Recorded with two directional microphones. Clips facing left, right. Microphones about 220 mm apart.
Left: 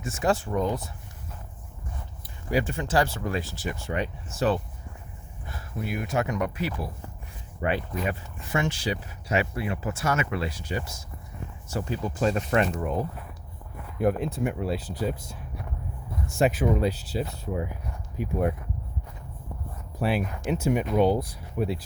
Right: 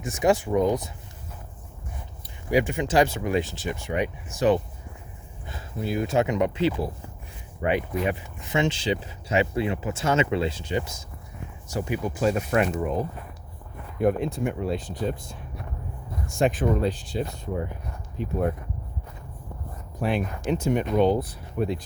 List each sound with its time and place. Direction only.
0.0 s speech: 15° right (ahead or behind)
2.5 s speech: 15° right (ahead or behind)
5.5 s speech: 25° right (ahead or behind); by 18.3 s 10° left (ahead or behind)
20.1 s speech: 10° left (ahead or behind)